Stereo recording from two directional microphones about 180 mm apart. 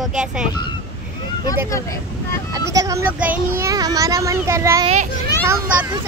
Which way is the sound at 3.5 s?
20° right (ahead or behind).